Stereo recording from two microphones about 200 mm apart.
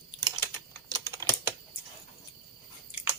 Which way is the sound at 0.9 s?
20° right (ahead or behind).